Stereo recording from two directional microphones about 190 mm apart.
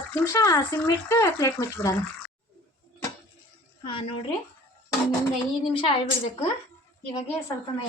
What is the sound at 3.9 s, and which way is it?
Speech, 30° left (ahead or behind).